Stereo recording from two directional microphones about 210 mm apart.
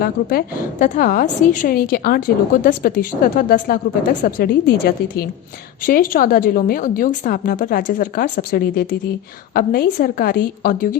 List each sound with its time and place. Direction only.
0.0 s a woman's voice: 45° left (ahead or behind)
5.8 s a woman's voice: 40° left (ahead or behind)